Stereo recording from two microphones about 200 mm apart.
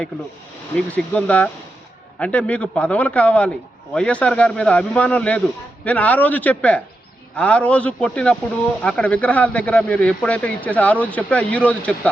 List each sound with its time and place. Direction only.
0.9 s a man's voice: 5° left (ahead or behind)